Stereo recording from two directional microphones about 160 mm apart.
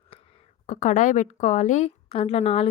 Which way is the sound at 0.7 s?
50° left (ahead or behind).